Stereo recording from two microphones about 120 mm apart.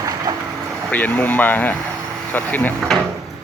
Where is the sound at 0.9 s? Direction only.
15° left (ahead or behind).